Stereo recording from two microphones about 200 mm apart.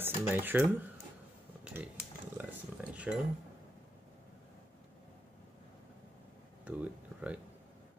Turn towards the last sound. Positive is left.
turn(degrees=-5)  # may be behind; listen again after turning